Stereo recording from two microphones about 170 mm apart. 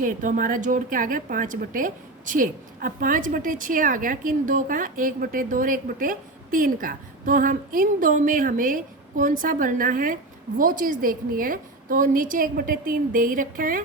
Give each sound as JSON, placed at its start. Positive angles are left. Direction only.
{"t": 0.0, "sound": "a woman's voice", "side_deg": -50}